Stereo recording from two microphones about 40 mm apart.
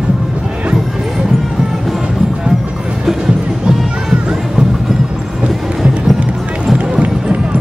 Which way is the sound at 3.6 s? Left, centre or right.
Centre.